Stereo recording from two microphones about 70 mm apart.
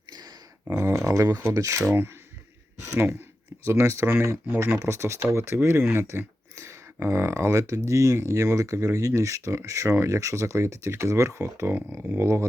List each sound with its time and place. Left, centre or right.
0.7 s speech: right
11.7 s speech: right